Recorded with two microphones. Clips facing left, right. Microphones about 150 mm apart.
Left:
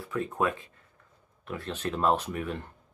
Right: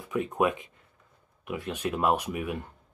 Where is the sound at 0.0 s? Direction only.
15° right (ahead or behind).